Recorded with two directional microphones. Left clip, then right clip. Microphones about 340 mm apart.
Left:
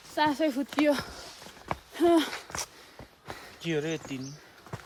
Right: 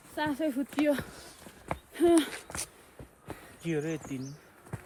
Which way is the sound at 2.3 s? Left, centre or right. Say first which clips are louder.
Left 4 dB; left.